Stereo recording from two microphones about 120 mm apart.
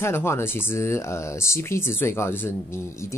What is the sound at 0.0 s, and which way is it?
Speech, 20° left (ahead or behind).